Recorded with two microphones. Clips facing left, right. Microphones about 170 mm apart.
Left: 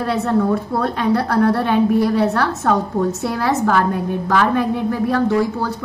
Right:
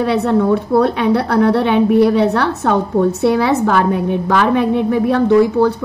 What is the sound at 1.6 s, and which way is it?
A woman's voice, 65° right (ahead or behind).